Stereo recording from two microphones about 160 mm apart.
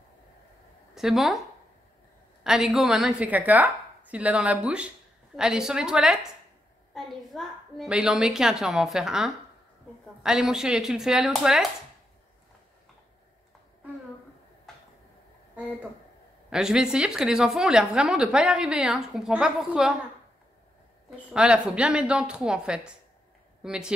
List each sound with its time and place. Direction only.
0.9 s speech: centre (ahead or behind)
2.4 s a woman's voice: 5° right (ahead or behind)
16.4 s a woman's voice: 5° right (ahead or behind)
21.3 s a woman's voice: 5° right (ahead or behind)